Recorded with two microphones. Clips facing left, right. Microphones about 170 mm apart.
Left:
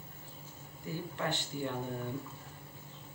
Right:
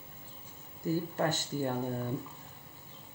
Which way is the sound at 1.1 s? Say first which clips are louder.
Right 5 dB; 40° right (ahead or behind).